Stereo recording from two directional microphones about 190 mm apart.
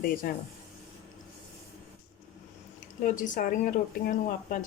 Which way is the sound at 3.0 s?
45° left (ahead or behind).